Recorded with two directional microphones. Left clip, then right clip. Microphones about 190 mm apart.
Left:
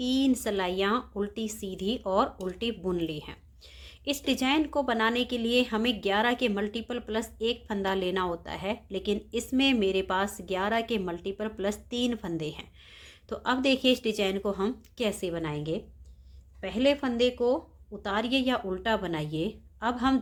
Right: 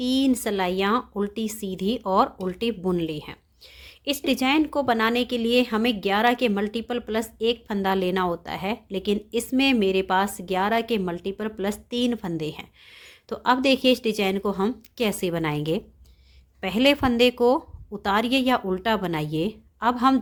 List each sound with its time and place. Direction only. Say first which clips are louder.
0.0 s speech: right 4 dB; 25° right (ahead or behind)